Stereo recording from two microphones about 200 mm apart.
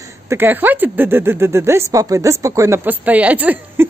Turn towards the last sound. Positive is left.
turn(degrees=-10)  # may be behind; listen again after turning